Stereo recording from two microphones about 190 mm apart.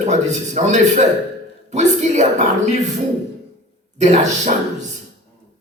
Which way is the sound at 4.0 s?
40° right (ahead or behind).